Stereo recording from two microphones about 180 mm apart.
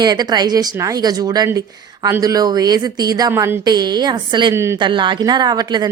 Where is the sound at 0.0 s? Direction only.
25° right (ahead or behind).